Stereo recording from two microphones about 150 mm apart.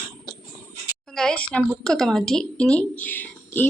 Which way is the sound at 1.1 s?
5° left (ahead or behind).